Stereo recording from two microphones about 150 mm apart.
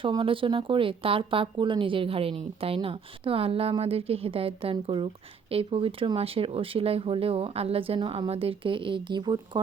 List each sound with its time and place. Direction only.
0.0 s speech: 35° right (ahead or behind)